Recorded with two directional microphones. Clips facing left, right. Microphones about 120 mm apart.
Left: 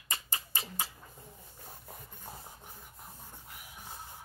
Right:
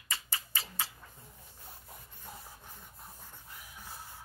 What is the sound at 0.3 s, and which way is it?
Tick-tock, 20° left (ahead or behind).